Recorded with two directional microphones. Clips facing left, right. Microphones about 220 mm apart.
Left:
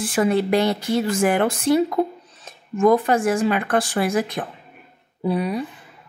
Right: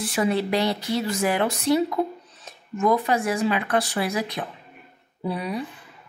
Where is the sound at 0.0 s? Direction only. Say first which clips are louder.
Left 4 dB; 50° left (ahead or behind).